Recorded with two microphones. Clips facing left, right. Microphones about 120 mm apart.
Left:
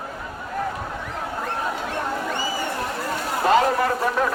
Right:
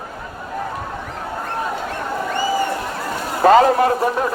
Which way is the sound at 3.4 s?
40° right (ahead or behind).